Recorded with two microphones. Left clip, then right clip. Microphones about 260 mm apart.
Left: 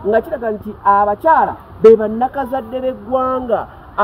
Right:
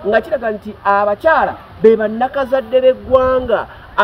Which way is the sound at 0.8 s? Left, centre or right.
Right.